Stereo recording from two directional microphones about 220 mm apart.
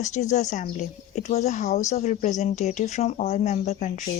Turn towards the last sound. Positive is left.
turn(degrees=30)  # may be behind; listen again after turning